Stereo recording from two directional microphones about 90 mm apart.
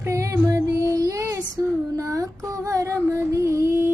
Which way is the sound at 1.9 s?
40° right (ahead or behind).